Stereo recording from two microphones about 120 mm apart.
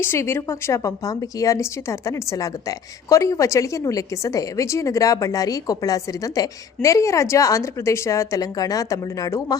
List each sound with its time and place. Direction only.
0.0 s a woman's voice: 20° left (ahead or behind)